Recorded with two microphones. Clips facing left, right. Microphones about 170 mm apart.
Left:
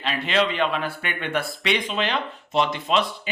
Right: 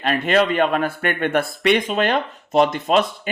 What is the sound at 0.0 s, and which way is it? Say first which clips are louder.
A man's voice: right 5 dB; 50° right (ahead or behind).